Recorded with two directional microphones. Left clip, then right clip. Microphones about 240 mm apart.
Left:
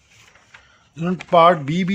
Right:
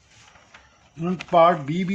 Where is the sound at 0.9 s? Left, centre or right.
Left.